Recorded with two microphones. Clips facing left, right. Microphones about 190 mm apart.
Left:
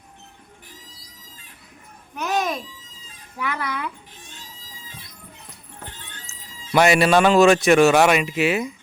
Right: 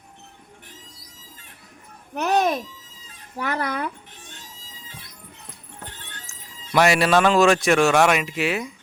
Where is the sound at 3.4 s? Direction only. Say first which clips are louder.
Right 2 dB; 40° right (ahead or behind).